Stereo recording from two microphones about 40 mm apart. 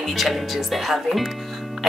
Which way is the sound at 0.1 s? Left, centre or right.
Centre.